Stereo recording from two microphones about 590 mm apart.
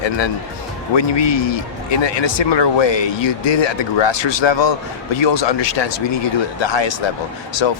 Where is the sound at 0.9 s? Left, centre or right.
Left.